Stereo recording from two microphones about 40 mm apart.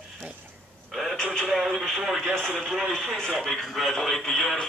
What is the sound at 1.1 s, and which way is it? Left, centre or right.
Radio, centre.